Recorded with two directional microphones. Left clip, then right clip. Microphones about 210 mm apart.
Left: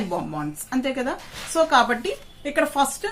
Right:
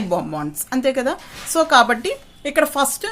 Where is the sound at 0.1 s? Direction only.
50° right (ahead or behind).